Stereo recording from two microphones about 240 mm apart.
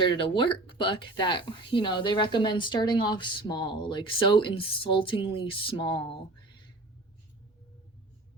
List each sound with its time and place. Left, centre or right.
0.0 s speech: centre